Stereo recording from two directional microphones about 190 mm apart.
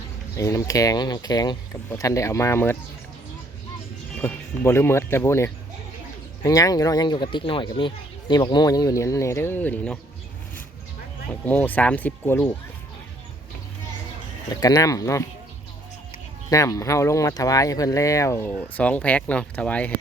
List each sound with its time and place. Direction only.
0.3 s speech: 15° left (ahead or behind)
4.2 s speech: 10° left (ahead or behind)
11.4 s speech: 10° left (ahead or behind)
14.5 s speech: 20° left (ahead or behind)
16.5 s speech: 15° left (ahead or behind)